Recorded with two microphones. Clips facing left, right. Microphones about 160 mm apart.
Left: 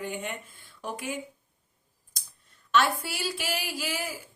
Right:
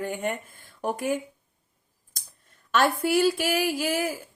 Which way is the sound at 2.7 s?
50° right (ahead or behind).